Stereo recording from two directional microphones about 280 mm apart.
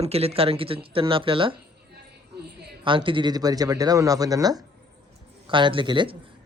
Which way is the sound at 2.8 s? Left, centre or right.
Centre.